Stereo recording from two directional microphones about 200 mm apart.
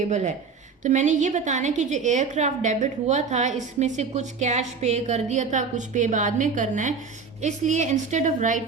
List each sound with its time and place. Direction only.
0.8 s a woman's voice: 35° right (ahead or behind)